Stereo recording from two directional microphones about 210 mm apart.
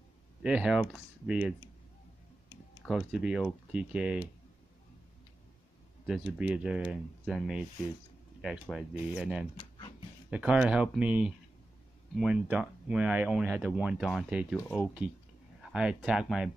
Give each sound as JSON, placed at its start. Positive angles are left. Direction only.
{"t": 0.4, "sound": "speech", "side_deg": -5}
{"t": 2.8, "sound": "speech", "side_deg": 0}
{"t": 6.0, "sound": "speech", "side_deg": -5}
{"t": 9.6, "sound": "a sound", "side_deg": 20}
{"t": 10.3, "sound": "speech", "side_deg": -5}
{"t": 14.6, "sound": "speech", "side_deg": 10}
{"t": 15.7, "sound": "speech", "side_deg": -5}